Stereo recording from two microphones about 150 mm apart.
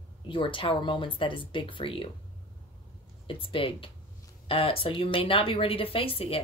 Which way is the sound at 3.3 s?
35° left (ahead or behind).